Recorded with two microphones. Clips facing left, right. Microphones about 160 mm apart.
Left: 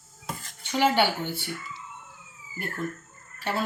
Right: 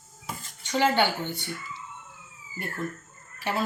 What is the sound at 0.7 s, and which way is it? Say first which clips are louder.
Speech: even; 10° left (ahead or behind).